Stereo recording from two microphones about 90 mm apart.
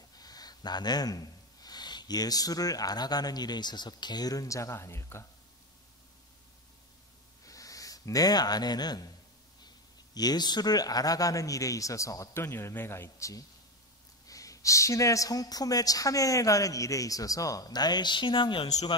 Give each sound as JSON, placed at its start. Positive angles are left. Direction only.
{"t": 0.1, "sound": "speech", "side_deg": 45}
{"t": 7.4, "sound": "speech", "side_deg": 40}